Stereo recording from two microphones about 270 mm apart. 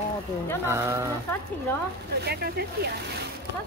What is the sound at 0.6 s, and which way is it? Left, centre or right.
Speech, centre.